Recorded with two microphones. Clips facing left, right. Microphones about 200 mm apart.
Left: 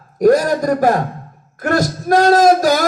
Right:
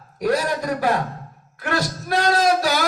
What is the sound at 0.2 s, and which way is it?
A man's voice, 45° left (ahead or behind).